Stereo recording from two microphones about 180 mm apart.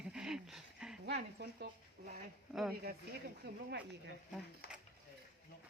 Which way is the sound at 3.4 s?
65° right (ahead or behind).